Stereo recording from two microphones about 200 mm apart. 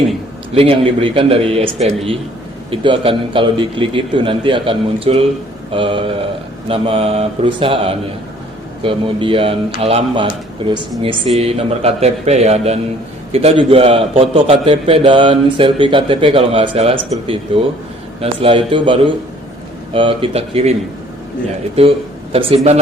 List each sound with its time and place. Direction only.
0.5 s a man's voice: 30° right (ahead or behind)
19.9 s a man's voice: 25° right (ahead or behind)
21.8 s speech: 30° right (ahead or behind)